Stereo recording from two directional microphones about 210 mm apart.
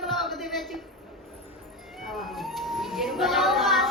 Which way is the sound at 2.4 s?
Centre (ahead or behind).